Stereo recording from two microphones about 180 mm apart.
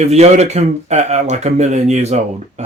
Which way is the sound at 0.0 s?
40° right (ahead or behind).